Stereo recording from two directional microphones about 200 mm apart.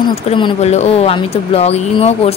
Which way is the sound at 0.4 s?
30° left (ahead or behind).